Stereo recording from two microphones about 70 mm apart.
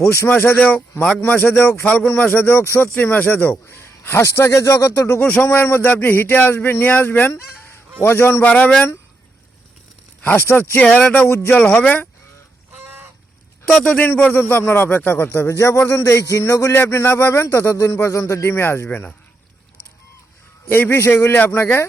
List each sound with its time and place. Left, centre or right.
0.0 s a man's voice: left
1.8 s a man's voice: centre
3.5 s speech: left
5.2 s a man's voice: left
8.4 s a man's voice: centre
10.2 s speech: left
10.9 s a man's voice: centre
13.7 s a man's voice: centre; by 18.9 s left
18.9 s a man's voice: left
20.7 s speech: left